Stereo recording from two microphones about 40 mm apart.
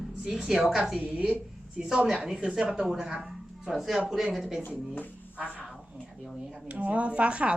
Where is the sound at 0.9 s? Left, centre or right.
Right.